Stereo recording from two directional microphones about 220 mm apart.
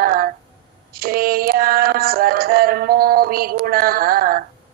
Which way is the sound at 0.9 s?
45° right (ahead or behind).